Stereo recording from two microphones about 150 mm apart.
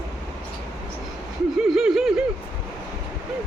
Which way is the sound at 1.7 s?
5° right (ahead or behind).